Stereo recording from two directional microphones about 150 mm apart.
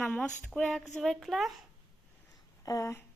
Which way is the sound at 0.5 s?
5° left (ahead or behind).